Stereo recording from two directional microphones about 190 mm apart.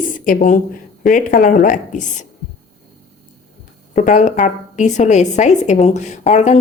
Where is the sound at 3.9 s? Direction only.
40° left (ahead or behind).